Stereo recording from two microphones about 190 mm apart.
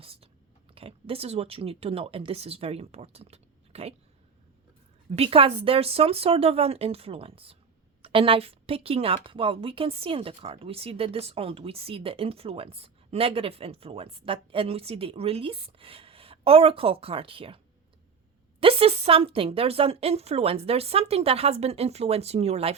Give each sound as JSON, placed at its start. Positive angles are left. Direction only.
{"t": 0.0, "sound": "speech", "side_deg": -30}
{"t": 5.1, "sound": "a woman's voice", "side_deg": -30}
{"t": 18.6, "sound": "a woman's voice", "side_deg": -30}